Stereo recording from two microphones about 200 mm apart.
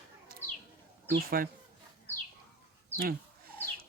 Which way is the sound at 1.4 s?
45° right (ahead or behind).